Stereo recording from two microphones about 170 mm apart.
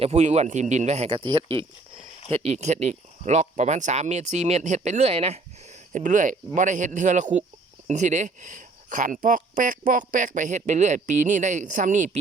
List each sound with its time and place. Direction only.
0.0 s speech: 40° right (ahead or behind)
5.9 s speech: 50° right (ahead or behind)